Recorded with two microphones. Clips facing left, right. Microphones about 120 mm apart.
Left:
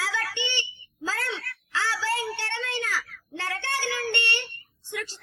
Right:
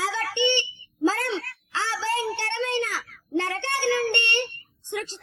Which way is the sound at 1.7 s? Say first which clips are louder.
Right 1 dB; 20° right (ahead or behind).